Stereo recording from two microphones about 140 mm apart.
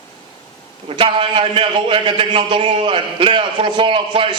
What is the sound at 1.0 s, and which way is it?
Speech, 40° right (ahead or behind).